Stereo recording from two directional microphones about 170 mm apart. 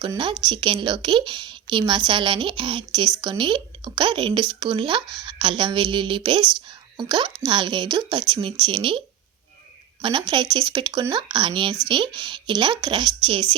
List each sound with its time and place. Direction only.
0.0 s a woman's voice: 30° right (ahead or behind)